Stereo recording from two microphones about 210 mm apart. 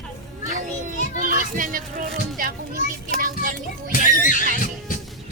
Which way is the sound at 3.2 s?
40° right (ahead or behind).